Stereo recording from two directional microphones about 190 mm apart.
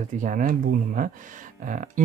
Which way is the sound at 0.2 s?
45° right (ahead or behind).